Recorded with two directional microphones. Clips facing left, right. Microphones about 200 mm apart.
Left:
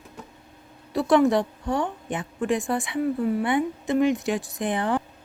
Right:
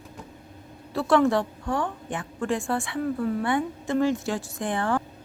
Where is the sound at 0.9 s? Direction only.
15° left (ahead or behind).